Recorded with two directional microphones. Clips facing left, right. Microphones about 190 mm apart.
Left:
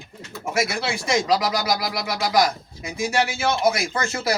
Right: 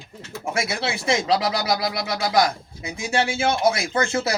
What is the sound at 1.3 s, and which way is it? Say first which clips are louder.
Speech: even; 25° right (ahead or behind).